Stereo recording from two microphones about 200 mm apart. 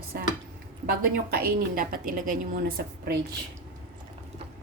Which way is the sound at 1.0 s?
50° right (ahead or behind).